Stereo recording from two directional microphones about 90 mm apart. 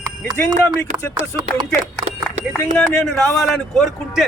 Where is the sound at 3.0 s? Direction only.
5° left (ahead or behind).